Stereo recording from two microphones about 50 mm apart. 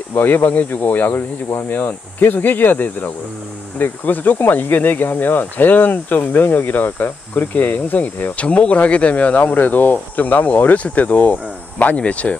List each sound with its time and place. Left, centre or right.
0.1 s speech: left
8.5 s speech: left